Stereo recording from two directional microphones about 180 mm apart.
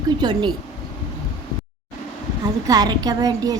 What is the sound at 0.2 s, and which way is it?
Speech, 25° right (ahead or behind).